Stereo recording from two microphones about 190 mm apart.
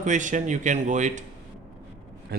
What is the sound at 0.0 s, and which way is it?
Speech, 40° right (ahead or behind).